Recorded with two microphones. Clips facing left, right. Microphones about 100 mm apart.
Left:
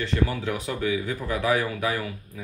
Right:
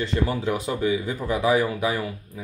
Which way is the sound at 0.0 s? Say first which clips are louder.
Right 2 dB; 25° right (ahead or behind).